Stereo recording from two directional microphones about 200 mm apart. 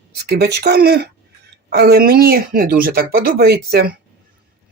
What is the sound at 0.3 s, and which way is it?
A man's voice, 55° right (ahead or behind).